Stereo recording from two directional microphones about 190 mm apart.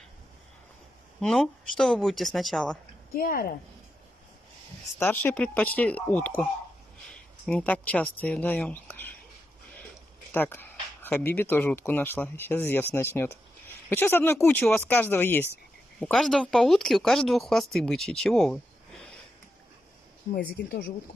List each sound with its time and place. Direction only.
1.2 s speech: 5° left (ahead or behind)
3.1 s speech: 50° left (ahead or behind)
4.9 s speech: 10° left (ahead or behind)
10.3 s speech: 10° left (ahead or behind)
20.3 s speech: 60° left (ahead or behind)